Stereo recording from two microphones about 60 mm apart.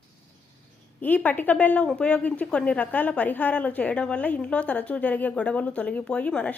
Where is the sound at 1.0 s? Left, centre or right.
Left.